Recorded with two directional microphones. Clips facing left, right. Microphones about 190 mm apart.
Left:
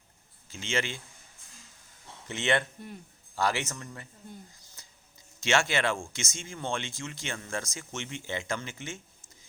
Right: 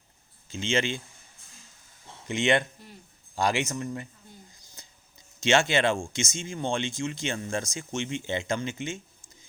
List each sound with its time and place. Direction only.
0.4 s speech: 20° right (ahead or behind)
2.2 s speech: 15° right (ahead or behind)
5.4 s speech: 20° right (ahead or behind)